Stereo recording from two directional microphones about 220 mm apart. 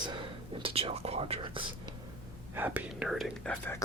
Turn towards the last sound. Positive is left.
turn(degrees=5)  # may be behind; listen again after turning